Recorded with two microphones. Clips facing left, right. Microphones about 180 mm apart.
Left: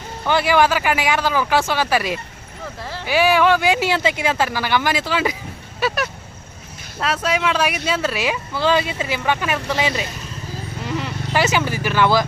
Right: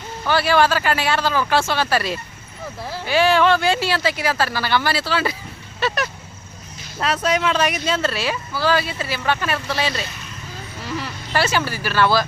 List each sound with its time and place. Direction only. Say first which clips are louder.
0.3 s speech: left 1 dB; 15° left (ahead or behind)
5.8 s speech: left 1 dB; 5° left (ahead or behind)